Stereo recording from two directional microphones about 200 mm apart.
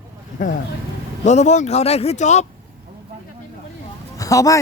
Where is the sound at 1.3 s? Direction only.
35° left (ahead or behind).